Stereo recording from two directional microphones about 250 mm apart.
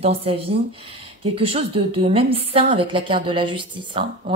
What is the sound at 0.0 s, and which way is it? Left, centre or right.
A woman's voice, right.